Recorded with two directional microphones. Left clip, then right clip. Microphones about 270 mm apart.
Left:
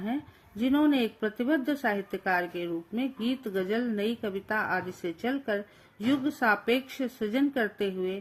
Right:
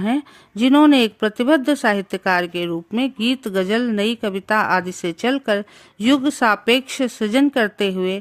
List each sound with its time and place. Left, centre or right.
0.0 s speech: right